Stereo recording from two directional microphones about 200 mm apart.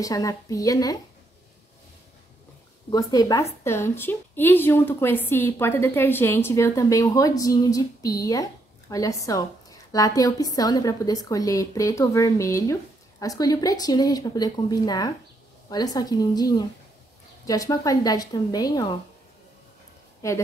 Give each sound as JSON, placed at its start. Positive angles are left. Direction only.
{"t": 0.0, "sound": "a woman's voice", "side_deg": 15}
{"t": 2.9, "sound": "a woman's voice", "side_deg": 20}
{"t": 20.2, "sound": "speech", "side_deg": 15}